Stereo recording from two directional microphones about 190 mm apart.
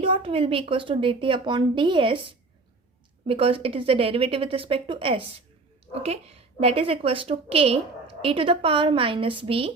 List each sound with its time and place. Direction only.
0.0 s a woman's voice: 30° right (ahead or behind)
3.2 s a woman's voice: 30° right (ahead or behind)